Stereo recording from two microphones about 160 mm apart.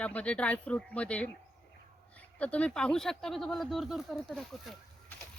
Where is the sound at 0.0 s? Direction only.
10° left (ahead or behind).